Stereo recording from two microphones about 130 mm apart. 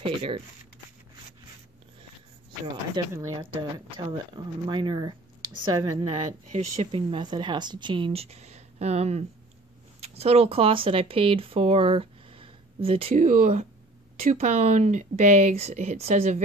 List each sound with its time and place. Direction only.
0.0 s speech: 40° right (ahead or behind)
3.0 s speech: 30° right (ahead or behind)
4.6 s speech: 40° right (ahead or behind)
6.0 s speech: 60° right (ahead or behind)
6.9 s speech: 40° right (ahead or behind)
13.1 s speech: 65° right (ahead or behind)